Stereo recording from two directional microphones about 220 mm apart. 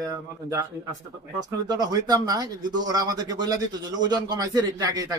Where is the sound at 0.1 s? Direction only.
15° right (ahead or behind).